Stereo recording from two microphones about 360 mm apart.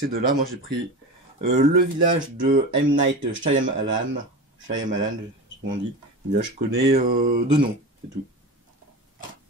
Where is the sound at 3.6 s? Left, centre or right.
Right.